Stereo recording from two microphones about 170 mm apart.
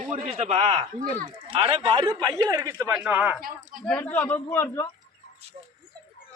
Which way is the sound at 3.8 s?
10° left (ahead or behind).